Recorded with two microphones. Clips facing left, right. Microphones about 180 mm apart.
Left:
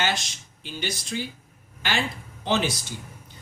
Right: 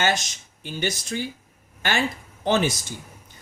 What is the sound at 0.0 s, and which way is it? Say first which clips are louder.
Speech: right 3 dB; 45° right (ahead or behind).